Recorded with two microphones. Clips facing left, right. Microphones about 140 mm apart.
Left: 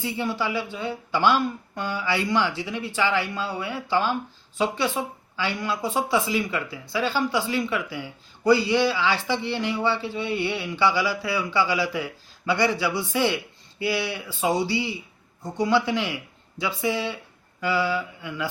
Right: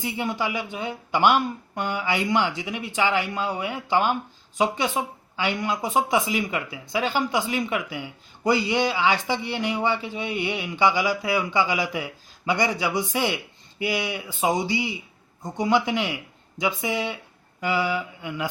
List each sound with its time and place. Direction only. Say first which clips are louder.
0.0 s speech: even; 15° right (ahead or behind)